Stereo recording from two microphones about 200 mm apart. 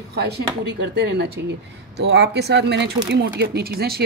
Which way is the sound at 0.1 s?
55° right (ahead or behind).